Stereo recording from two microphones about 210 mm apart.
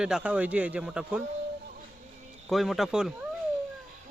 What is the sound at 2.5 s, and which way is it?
Speech, centre (ahead or behind).